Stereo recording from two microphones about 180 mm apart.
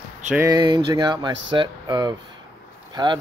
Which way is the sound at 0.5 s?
25° right (ahead or behind).